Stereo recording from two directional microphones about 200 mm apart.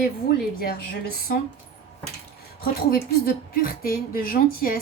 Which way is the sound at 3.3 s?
45° left (ahead or behind).